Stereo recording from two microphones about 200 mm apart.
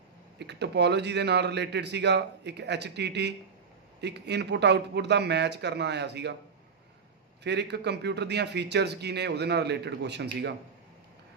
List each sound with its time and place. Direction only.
0.4 s a man's voice: 60° right (ahead or behind)
7.4 s a man's voice: 60° right (ahead or behind)